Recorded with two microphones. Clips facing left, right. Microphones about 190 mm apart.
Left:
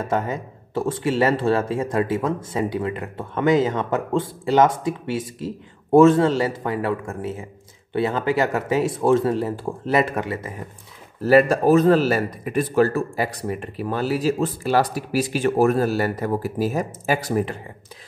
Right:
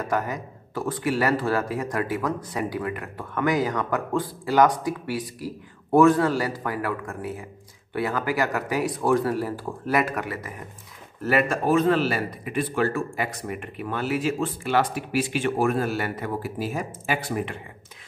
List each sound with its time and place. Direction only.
0.0 s speech: 25° left (ahead or behind)